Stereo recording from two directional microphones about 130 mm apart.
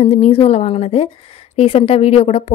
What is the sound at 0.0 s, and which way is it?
A woman's voice, 55° left (ahead or behind).